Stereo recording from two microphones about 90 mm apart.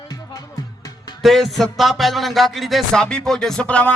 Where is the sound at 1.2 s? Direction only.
Centre (ahead or behind).